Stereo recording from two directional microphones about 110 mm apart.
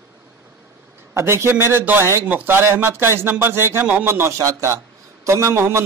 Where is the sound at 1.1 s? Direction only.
25° right (ahead or behind).